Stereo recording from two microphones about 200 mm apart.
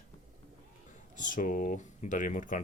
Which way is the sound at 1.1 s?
40° left (ahead or behind).